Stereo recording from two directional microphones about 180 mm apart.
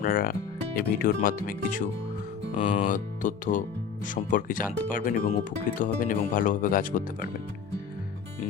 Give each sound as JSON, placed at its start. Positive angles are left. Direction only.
{"t": 0.0, "sound": "speech", "side_deg": 50}